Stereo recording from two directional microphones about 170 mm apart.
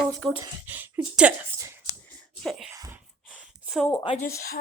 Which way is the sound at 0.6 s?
10° right (ahead or behind).